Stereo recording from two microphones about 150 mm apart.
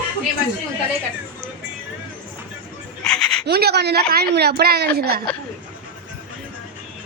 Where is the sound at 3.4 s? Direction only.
90° right.